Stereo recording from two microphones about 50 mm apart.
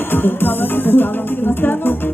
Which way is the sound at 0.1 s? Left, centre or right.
Left.